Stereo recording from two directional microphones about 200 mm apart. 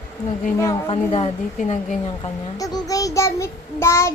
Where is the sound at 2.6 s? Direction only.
15° left (ahead or behind).